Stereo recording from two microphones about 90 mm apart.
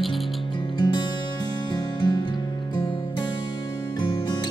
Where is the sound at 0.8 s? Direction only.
50° left (ahead or behind).